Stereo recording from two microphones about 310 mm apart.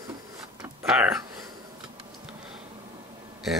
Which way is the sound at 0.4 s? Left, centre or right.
Centre.